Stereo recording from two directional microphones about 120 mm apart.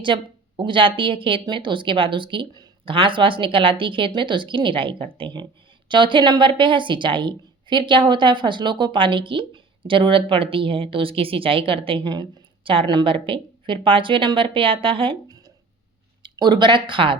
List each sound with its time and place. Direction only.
0.0 s a woman's voice: 45° right (ahead or behind)
16.2 s speech: 40° right (ahead or behind)